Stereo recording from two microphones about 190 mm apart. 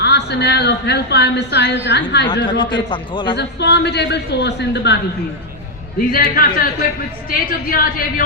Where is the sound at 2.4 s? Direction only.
25° left (ahead or behind).